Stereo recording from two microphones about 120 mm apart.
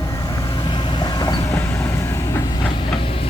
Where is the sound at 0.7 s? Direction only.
40° left (ahead or behind).